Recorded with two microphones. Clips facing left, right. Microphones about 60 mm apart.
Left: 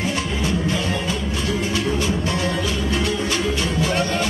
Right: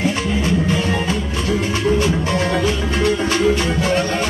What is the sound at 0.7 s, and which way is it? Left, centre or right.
Music, right.